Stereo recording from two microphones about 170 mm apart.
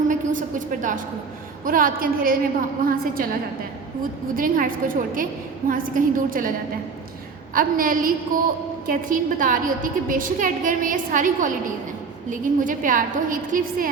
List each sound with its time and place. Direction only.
0.1 s a woman's voice: 50° right (ahead or behind)
4.4 s a woman's voice: 55° right (ahead or behind)
7.5 s a woman's voice: 55° right (ahead or behind)